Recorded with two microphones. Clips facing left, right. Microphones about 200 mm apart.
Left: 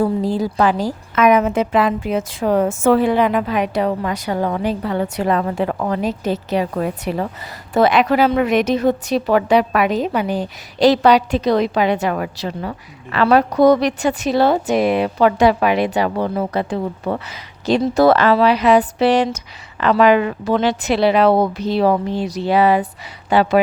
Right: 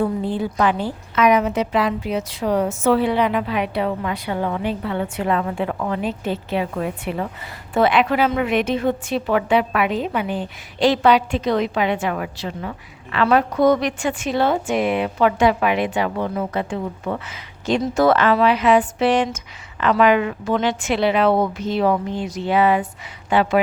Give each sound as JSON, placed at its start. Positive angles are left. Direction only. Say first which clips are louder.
{"t": 0.0, "sound": "a woman's voice", "louder": "left 3 dB", "side_deg": 40}
{"t": 1.1, "sound": "a woman's voice", "louder": "left 3 dB", "side_deg": 50}